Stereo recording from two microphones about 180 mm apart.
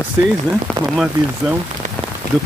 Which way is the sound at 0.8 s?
5° right (ahead or behind).